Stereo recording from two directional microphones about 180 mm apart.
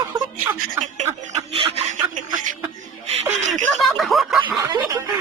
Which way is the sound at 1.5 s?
30° right (ahead or behind).